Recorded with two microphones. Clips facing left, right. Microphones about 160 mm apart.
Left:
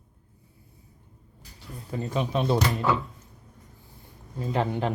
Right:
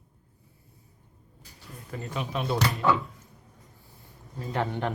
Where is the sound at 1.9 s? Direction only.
35° left (ahead or behind).